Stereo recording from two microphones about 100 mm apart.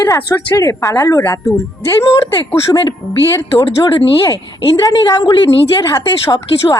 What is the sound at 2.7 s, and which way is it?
A woman's voice, 45° left (ahead or behind).